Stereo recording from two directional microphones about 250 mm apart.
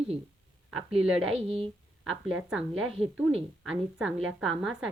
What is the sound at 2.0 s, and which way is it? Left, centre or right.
A woman's voice, centre.